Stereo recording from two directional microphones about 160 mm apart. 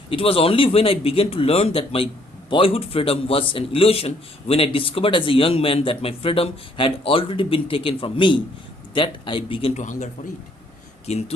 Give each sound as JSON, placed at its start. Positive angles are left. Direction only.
{"t": 0.1, "sound": "a man's voice", "side_deg": 35}
{"t": 9.8, "sound": "speech", "side_deg": 50}
{"t": 11.0, "sound": "speech", "side_deg": 40}